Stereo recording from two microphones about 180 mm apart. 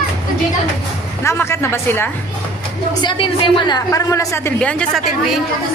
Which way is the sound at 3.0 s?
25° left (ahead or behind).